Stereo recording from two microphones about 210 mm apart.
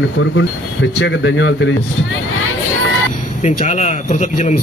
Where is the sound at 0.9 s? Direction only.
60° left (ahead or behind).